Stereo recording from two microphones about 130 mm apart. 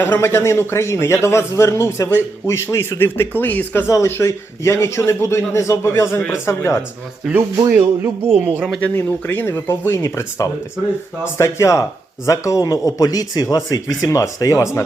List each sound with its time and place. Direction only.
0.0 s speech: 15° left (ahead or behind)
7.5 s speech: 25° right (ahead or behind)
8.3 s speech: 15° right (ahead or behind)
9.0 s speech: 15° left (ahead or behind)